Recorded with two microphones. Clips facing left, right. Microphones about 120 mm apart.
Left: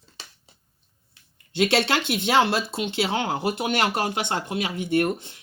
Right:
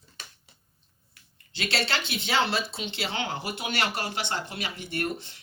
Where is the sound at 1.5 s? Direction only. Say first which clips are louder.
Left 8 dB; 55° left (ahead or behind).